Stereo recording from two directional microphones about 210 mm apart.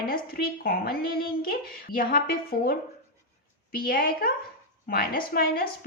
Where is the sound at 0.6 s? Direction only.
45° left (ahead or behind).